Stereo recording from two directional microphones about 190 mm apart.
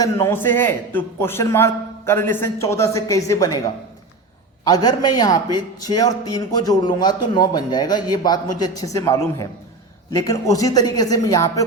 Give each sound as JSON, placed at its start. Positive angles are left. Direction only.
{"t": 0.0, "sound": "a man's voice", "side_deg": 15}
{"t": 4.6, "sound": "a man's voice", "side_deg": 20}